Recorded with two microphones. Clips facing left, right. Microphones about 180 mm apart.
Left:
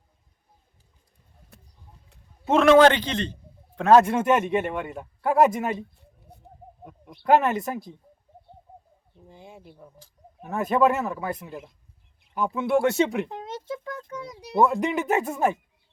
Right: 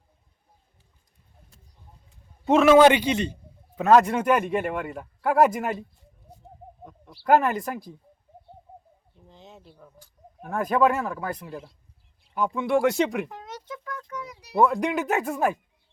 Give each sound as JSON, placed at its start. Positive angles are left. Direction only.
{"t": 1.5, "sound": "bird", "side_deg": 65}
{"t": 2.4, "sound": "a man's voice", "side_deg": 0}
{"t": 6.3, "sound": "bird", "side_deg": 60}
{"t": 7.1, "sound": "a man's voice", "side_deg": 0}
{"t": 9.2, "sound": "a man's voice", "side_deg": 10}
{"t": 13.2, "sound": "a sound", "side_deg": 25}
{"t": 14.1, "sound": "music", "side_deg": 30}
{"t": 14.6, "sound": "a man's voice", "side_deg": 5}